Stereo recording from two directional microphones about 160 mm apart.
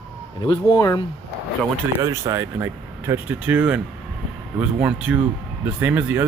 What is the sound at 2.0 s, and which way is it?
Speech, 20° right (ahead or behind).